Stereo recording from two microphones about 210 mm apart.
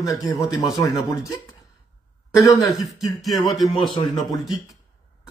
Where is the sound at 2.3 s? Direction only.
15° left (ahead or behind).